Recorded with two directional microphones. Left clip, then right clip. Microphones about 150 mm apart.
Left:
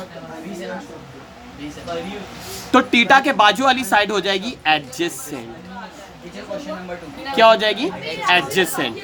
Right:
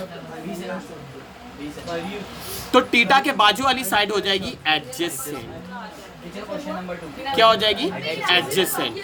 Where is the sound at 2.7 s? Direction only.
50° left (ahead or behind).